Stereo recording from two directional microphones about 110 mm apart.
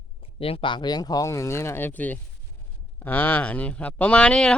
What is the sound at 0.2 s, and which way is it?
Speech, 60° left (ahead or behind).